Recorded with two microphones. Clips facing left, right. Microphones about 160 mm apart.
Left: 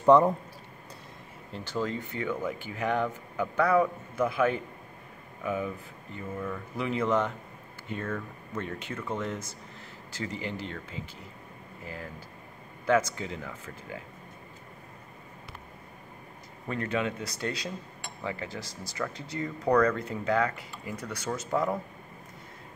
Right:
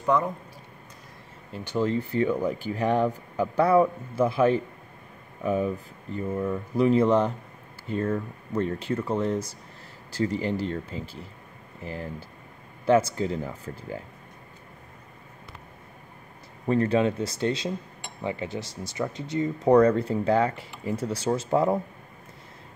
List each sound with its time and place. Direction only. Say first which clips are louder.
0.0 s speech: left 5 dB; 30° left (ahead or behind)
1.5 s speech: right 5 dB; 15° right (ahead or behind)
1.9 s speech: right 8 dB; 35° right (ahead or behind)
16.6 s speech: right 8 dB; 35° right (ahead or behind)